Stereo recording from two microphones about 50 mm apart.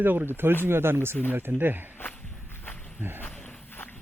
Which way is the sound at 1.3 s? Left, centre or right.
Right.